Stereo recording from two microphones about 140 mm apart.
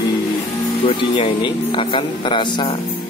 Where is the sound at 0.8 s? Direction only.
40° left (ahead or behind).